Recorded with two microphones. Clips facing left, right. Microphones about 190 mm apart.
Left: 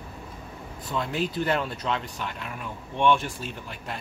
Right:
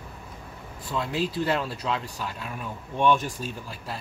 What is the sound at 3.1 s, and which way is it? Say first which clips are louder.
Speech: even; 40° right (ahead or behind).